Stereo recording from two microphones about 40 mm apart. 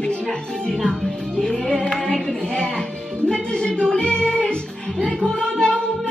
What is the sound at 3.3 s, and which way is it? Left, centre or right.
Speech, centre.